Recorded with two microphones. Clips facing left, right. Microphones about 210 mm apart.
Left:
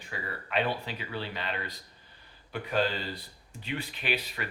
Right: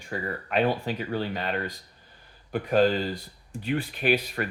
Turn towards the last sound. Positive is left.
turn(degrees=-50)  # may be behind; listen again after turning